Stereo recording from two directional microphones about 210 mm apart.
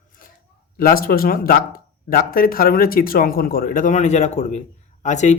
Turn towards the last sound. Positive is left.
turn(degrees=35)  # may be behind; listen again after turning